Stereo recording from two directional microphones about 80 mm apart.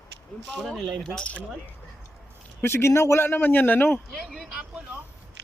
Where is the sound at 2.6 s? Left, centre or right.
Left.